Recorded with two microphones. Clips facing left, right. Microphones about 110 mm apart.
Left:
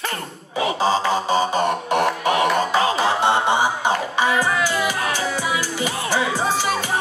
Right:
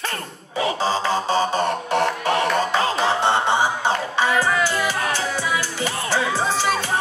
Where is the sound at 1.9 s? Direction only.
15° left (ahead or behind).